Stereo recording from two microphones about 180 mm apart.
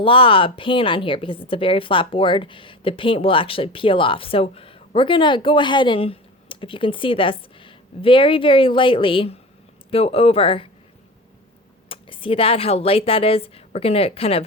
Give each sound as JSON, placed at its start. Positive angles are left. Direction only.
{"t": 0.0, "sound": "a woman's voice", "side_deg": 30}
{"t": 11.9, "sound": "speech", "side_deg": 30}